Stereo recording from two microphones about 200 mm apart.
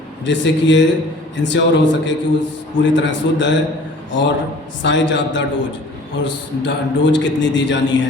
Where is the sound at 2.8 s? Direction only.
65° left (ahead or behind).